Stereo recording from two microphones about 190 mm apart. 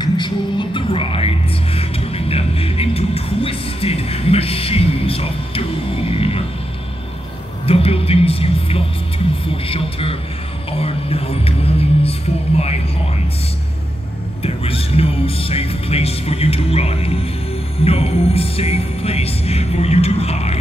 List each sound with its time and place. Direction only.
0.0 s music: 25° left (ahead or behind)
7.6 s music: 30° left (ahead or behind)
9.5 s a man's voice: 30° left (ahead or behind)
10.7 s music: 30° left (ahead or behind)
14.4 s speech: 30° left (ahead or behind)